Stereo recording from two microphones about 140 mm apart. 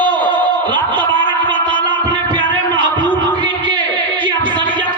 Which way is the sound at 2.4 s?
10° left (ahead or behind).